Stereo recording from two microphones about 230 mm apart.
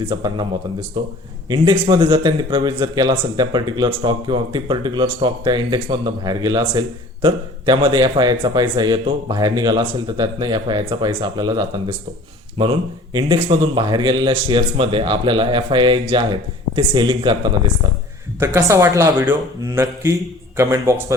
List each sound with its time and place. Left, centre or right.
0.0 s a man's voice: right
18.3 s speech: centre